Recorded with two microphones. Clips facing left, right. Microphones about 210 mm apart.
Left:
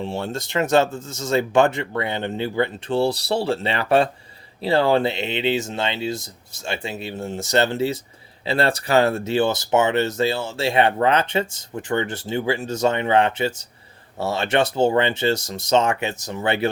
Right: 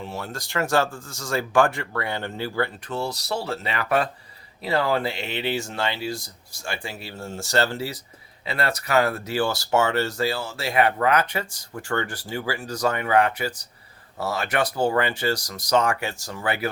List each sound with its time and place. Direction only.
0.0 s speech: 30° left (ahead or behind)